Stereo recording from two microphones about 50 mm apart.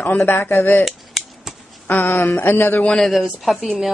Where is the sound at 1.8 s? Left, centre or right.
Left.